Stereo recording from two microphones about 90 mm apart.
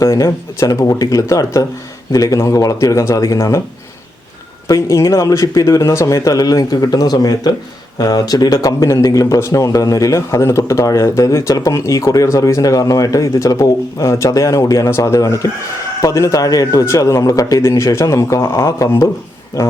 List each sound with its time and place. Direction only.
0.0 s speech: 35° left (ahead or behind)
4.7 s speech: 35° left (ahead or behind)